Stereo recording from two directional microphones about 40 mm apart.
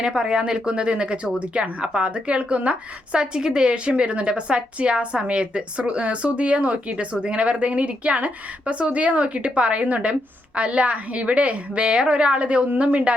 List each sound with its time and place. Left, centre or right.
0.0 s a woman's voice: centre